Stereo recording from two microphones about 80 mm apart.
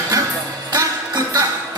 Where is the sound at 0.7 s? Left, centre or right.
Right.